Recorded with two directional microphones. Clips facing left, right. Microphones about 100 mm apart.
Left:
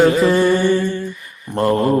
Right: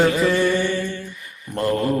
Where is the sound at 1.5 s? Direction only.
35° left (ahead or behind).